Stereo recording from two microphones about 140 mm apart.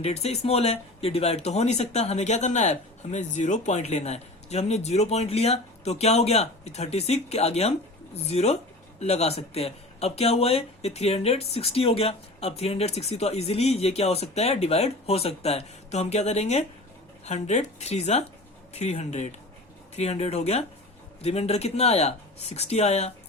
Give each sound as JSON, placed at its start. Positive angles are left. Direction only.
{"t": 0.0, "sound": "speech", "side_deg": 45}